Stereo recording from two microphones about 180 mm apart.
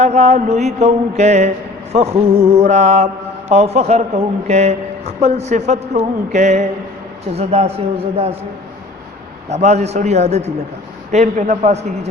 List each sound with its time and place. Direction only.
0.0 s speech: 35° right (ahead or behind)
9.5 s speech: 40° right (ahead or behind)